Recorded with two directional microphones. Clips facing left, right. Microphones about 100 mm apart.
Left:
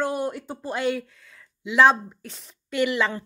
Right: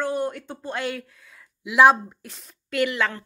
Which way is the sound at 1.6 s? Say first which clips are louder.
Right 2 dB; 10° right (ahead or behind).